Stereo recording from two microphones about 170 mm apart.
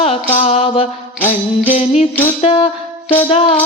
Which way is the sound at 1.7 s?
40° left (ahead or behind).